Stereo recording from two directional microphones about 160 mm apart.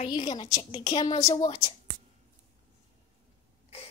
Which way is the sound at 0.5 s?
45° left (ahead or behind).